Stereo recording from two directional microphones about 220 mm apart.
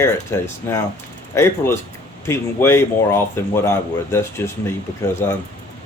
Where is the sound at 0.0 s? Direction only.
15° left (ahead or behind).